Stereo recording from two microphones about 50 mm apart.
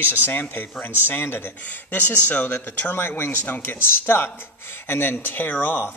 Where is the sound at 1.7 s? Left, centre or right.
Left.